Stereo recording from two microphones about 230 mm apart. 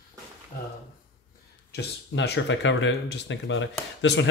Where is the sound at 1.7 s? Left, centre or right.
Left.